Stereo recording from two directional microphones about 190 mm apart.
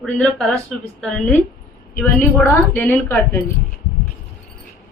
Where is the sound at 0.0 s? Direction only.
5° left (ahead or behind).